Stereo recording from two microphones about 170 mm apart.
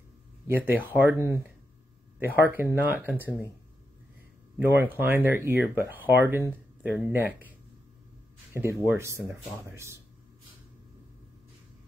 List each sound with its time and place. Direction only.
0.5 s speech: 10° right (ahead or behind)
4.6 s speech: 10° right (ahead or behind)
8.5 s speech: 15° right (ahead or behind)